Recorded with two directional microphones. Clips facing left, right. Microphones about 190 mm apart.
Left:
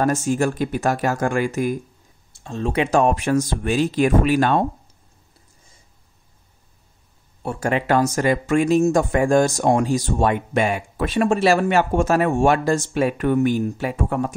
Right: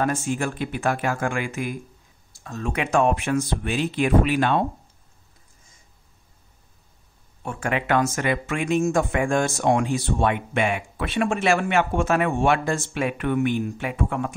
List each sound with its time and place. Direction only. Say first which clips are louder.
0.0 s speech: left 5 dB; 40° left (ahead or behind)
2.3 s speech: left 6 dB; 25° left (ahead or behind); by 4.6 s 45° left (ahead or behind)
7.4 s speech: left 4 dB; 35° left (ahead or behind)